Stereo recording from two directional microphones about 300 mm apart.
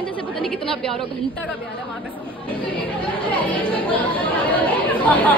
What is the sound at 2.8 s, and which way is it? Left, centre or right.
Speech, centre.